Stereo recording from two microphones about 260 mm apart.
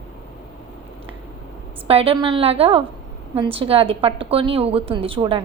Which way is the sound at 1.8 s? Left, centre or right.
Right.